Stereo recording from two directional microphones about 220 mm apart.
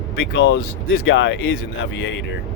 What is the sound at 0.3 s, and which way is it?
Speech, 50° left (ahead or behind).